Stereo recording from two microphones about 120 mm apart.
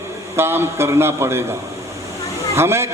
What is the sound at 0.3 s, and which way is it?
A man's voice, 20° right (ahead or behind).